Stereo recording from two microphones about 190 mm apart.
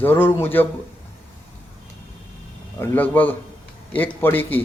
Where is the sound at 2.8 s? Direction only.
10° left (ahead or behind).